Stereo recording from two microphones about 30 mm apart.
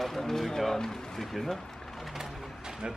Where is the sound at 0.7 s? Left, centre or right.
Left.